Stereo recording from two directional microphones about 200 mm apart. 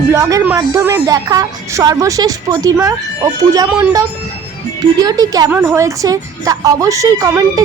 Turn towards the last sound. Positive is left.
turn(degrees=-15)  # may be behind; listen again after turning